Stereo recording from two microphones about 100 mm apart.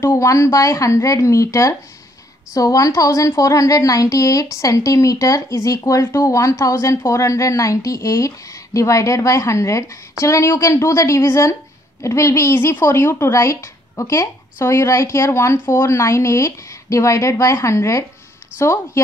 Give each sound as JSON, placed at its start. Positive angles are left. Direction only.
{"t": 0.0, "sound": "a woman's voice", "side_deg": 30}